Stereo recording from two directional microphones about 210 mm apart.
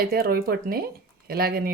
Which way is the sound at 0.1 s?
45° right (ahead or behind).